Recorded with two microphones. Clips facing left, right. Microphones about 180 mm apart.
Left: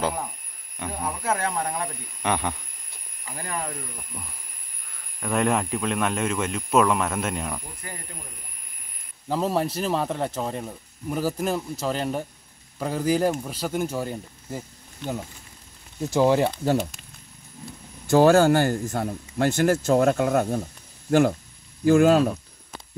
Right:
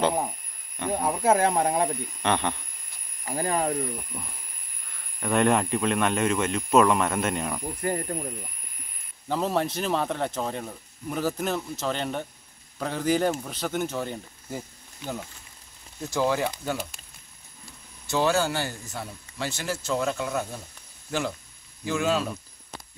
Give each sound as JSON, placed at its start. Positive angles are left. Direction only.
{"t": 0.9, "sound": "speech", "side_deg": -30}
{"t": 2.2, "sound": "speech", "side_deg": 5}
{"t": 3.3, "sound": "speech", "side_deg": -35}
{"t": 5.2, "sound": "speech", "side_deg": 0}
{"t": 7.8, "sound": "speech", "side_deg": -45}
{"t": 9.3, "sound": "speech", "side_deg": 5}
{"t": 16.1, "sound": "speech", "side_deg": 20}
{"t": 16.6, "sound": "speech", "side_deg": 45}
{"t": 18.0, "sound": "speech", "side_deg": 50}